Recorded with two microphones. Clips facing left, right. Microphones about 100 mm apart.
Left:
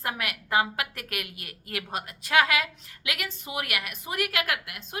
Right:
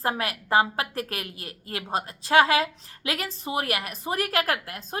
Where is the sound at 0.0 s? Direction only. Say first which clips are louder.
Right 5 dB; 35° right (ahead or behind).